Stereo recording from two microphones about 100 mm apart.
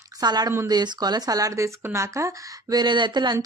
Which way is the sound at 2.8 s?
50° right (ahead or behind).